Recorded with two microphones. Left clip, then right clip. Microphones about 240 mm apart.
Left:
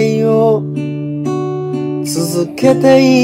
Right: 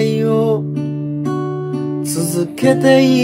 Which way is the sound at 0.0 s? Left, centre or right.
Centre.